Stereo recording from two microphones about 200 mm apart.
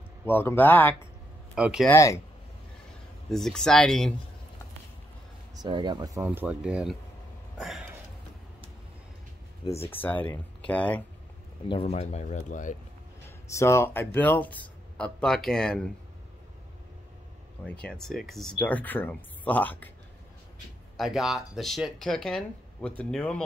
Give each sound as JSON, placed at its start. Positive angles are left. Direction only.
{"t": 0.3, "sound": "speech", "side_deg": 10}
{"t": 1.5, "sound": "speech", "side_deg": 0}
{"t": 1.9, "sound": "speech", "side_deg": 15}
{"t": 3.3, "sound": "speech", "side_deg": 0}
{"t": 5.6, "sound": "speech", "side_deg": -25}
{"t": 7.5, "sound": "a sound", "side_deg": 0}
{"t": 9.8, "sound": "speech", "side_deg": 10}
{"t": 11.7, "sound": "speech", "side_deg": 30}
{"t": 13.5, "sound": "speech", "side_deg": 15}
{"t": 17.8, "sound": "speech", "side_deg": 0}
{"t": 20.9, "sound": "speech", "side_deg": 0}